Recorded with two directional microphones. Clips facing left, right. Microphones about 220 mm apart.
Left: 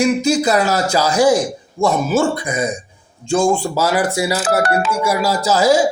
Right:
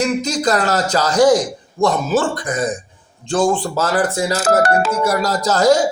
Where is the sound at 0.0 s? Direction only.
10° left (ahead or behind).